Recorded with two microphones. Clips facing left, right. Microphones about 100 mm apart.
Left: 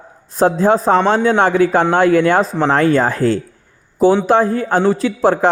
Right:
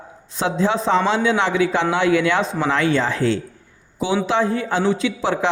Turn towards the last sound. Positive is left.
turn(degrees=45)  # may be behind; listen again after turning